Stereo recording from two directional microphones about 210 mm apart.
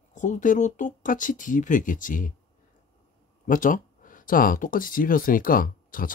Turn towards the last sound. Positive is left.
turn(degrees=40)  # may be behind; listen again after turning